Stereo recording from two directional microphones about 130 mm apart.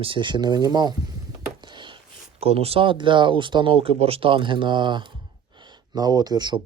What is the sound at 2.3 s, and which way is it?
Speech, 50° right (ahead or behind).